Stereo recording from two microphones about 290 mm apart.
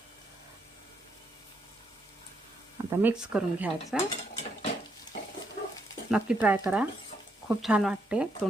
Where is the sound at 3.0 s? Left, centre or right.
Centre.